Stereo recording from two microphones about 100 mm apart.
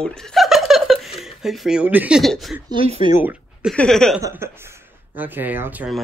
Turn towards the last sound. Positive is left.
turn(degrees=-20)  # may be behind; listen again after turning